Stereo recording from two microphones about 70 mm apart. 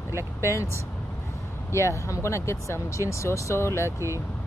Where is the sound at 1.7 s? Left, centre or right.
Left.